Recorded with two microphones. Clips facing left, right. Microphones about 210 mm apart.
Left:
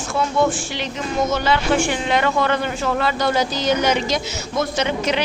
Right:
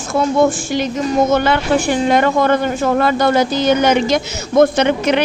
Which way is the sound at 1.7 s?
40° right (ahead or behind).